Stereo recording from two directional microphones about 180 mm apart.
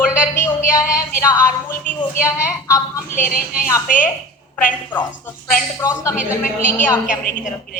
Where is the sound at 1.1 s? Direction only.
15° left (ahead or behind).